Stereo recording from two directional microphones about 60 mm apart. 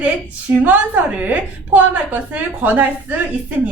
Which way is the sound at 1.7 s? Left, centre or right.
Right.